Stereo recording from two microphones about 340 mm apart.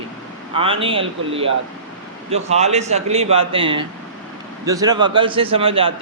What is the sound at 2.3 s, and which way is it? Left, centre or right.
A man's voice, centre.